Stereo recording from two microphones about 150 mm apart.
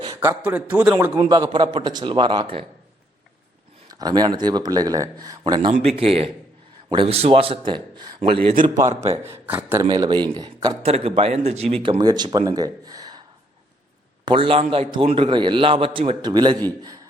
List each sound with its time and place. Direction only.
0.2 s a man's voice: 15° right (ahead or behind)
1.3 s a man's voice: 30° right (ahead or behind)
3.8 s speech: 25° right (ahead or behind)
5.8 s a man's voice: 40° right (ahead or behind)
8.6 s a man's voice: 25° right (ahead or behind)
9.8 s speech: 30° right (ahead or behind)
10.9 s speech: 40° right (ahead or behind)
14.3 s a man's voice: 35° right (ahead or behind)